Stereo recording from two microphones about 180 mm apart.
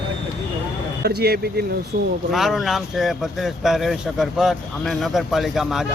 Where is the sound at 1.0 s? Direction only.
60° right (ahead or behind).